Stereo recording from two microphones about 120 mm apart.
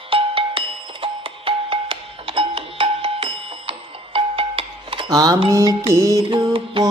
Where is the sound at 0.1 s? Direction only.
50° right (ahead or behind).